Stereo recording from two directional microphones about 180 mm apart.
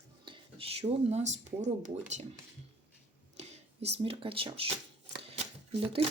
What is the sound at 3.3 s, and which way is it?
Speech, 35° right (ahead or behind).